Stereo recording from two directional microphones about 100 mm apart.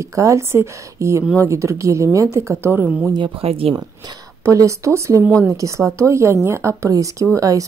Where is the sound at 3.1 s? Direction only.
55° right (ahead or behind).